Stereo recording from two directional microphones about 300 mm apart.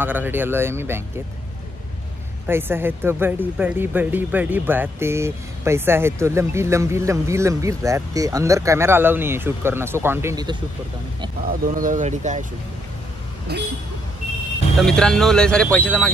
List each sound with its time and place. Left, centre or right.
0.0 s speech: centre
2.4 s speech: centre
11.6 s speech: right
13.5 s speech: right
14.8 s speech: centre